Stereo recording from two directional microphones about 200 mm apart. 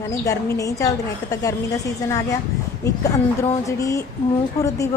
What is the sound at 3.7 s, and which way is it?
Speech, 15° left (ahead or behind).